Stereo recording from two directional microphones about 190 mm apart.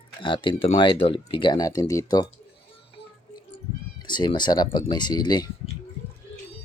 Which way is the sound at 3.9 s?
20° left (ahead or behind).